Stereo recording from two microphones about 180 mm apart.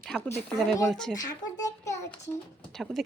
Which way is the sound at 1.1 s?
20° left (ahead or behind).